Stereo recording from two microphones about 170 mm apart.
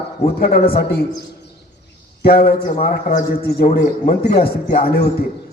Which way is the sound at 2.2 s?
65° left (ahead or behind).